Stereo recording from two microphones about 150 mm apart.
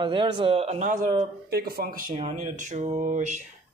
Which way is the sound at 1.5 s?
90° right.